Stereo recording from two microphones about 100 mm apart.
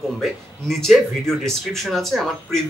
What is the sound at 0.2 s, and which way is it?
Speech, centre (ahead or behind).